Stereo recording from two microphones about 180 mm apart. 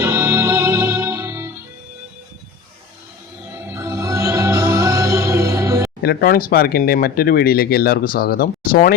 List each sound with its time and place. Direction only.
0.0 s music: 15° right (ahead or behind)
3.7 s music: 15° right (ahead or behind)
6.0 s speech: 60° left (ahead or behind)